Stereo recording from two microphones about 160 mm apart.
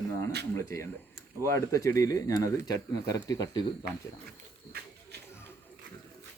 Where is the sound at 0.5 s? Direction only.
15° left (ahead or behind).